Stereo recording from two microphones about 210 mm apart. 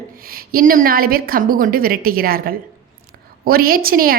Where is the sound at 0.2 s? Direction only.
45° right (ahead or behind).